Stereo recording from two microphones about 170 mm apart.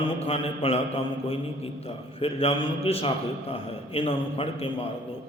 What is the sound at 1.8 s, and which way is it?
A man's voice, 35° left (ahead or behind).